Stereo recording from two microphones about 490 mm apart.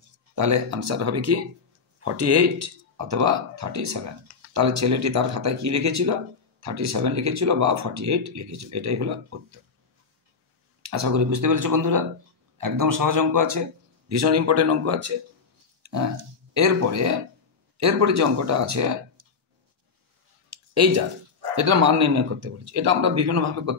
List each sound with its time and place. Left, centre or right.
0.4 s speech: right
10.8 s speech: right
15.8 s a sound: right
16.5 s speech: right
20.4 s a sound: right
21.5 s speech: right